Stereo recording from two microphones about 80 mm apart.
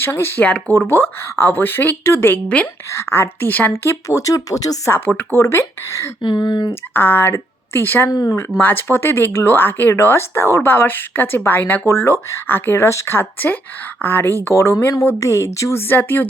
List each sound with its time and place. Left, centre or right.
0.0 s speech: left
3.7 s speech: left
4.9 s speech: left
5.4 s speech: left
6.2 s speech: left
6.9 s speech: left
8.1 s speech: left
8.6 s speech: left
15.9 s speech: left